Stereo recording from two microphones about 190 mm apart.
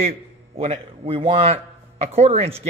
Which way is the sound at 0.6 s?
30° right (ahead or behind).